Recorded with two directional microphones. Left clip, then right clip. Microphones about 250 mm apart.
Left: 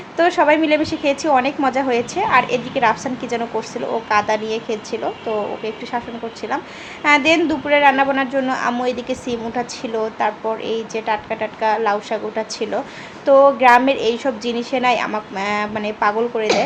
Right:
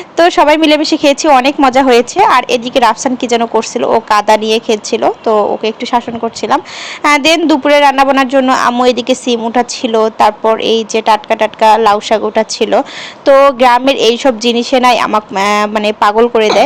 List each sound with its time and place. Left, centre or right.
0.2 s a woman's voice: right